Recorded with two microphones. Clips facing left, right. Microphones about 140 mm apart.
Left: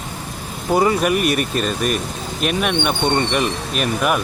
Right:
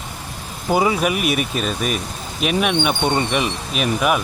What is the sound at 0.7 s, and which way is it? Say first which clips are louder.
Speech: left 2 dB; 5° right (ahead or behind).